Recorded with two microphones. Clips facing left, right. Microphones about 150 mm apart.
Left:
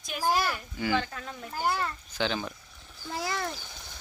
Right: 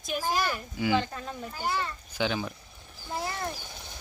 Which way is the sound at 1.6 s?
45° left (ahead or behind).